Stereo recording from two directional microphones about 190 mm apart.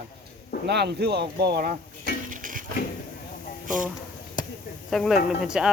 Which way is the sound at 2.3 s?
45° right (ahead or behind).